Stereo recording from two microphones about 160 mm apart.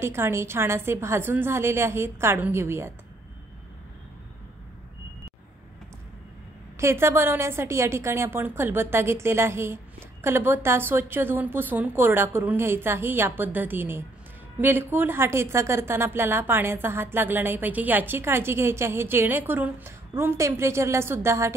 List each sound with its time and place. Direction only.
0.0 s a woman's voice: 15° right (ahead or behind)
6.8 s a woman's voice: 15° right (ahead or behind)